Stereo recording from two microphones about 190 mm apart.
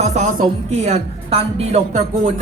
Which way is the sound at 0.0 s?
35° right (ahead or behind).